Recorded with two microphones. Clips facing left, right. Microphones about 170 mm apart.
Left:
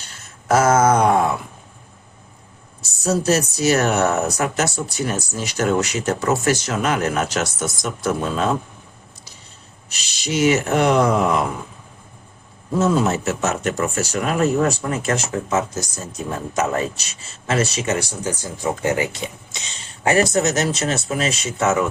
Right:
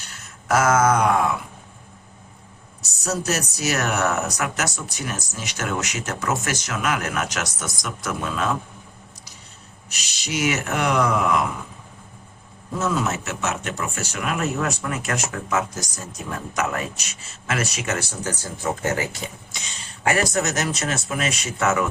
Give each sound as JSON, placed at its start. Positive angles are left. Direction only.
{"t": 0.4, "sound": "a sound", "side_deg": 30}
{"t": 2.8, "sound": "speech", "side_deg": 30}
{"t": 9.9, "sound": "speech", "side_deg": 30}
{"t": 12.8, "sound": "speech", "side_deg": 30}
{"t": 17.9, "sound": "speech", "side_deg": 15}